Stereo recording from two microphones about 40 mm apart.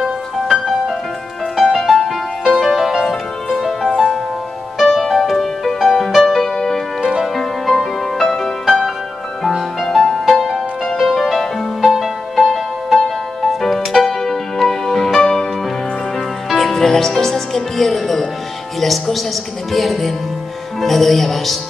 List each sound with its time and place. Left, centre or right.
0.0 s music: centre
7.0 s music: centre
7.3 s music: centre
9.9 s music: centre
11.8 s music: centre
12.5 s music: centre
16.4 s music: centre
19.7 s speech: centre
20.8 s music: centre